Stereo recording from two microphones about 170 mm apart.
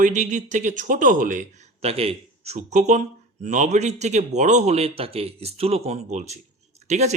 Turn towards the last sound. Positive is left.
turn(degrees=-40)  # may be behind; listen again after turning